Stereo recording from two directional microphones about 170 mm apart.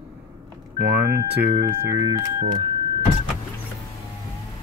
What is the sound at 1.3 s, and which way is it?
Speech, 10° right (ahead or behind).